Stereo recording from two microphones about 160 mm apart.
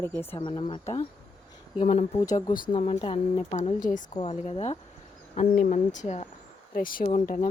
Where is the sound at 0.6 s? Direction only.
45° left (ahead or behind).